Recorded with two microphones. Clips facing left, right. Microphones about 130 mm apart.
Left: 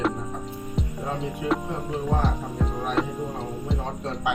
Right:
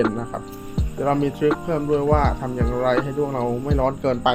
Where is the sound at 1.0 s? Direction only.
75° right (ahead or behind).